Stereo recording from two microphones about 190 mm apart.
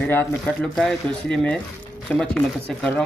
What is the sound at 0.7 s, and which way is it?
Speech, 5° left (ahead or behind).